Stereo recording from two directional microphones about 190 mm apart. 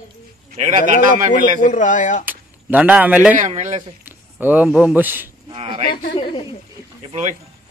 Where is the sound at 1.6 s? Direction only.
45° left (ahead or behind).